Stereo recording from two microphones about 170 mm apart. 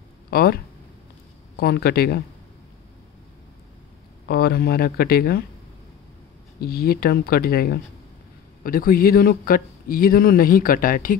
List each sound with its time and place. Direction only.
0.3 s speech: 65° left (ahead or behind)
1.6 s speech: 65° left (ahead or behind)
4.3 s speech: 70° left (ahead or behind)
6.6 s speech: 65° left (ahead or behind)